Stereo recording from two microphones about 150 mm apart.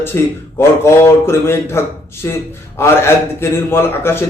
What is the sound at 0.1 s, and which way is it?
A man's voice, 15° left (ahead or behind).